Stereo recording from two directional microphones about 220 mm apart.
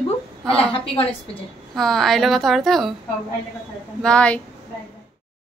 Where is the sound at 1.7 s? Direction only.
Centre (ahead or behind).